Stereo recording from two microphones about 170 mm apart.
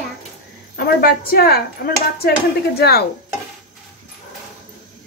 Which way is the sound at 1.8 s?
70° left (ahead or behind).